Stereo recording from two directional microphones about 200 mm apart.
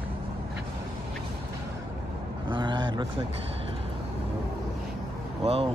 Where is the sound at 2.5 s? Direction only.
25° right (ahead or behind).